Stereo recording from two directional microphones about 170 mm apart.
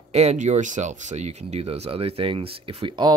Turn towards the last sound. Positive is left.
turn(degrees=-25)  # may be behind; listen again after turning